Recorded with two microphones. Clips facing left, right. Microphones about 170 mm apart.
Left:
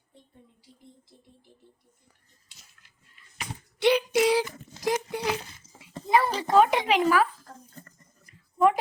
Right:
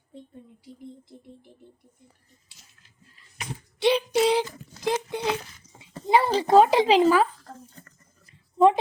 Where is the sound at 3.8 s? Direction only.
25° right (ahead or behind).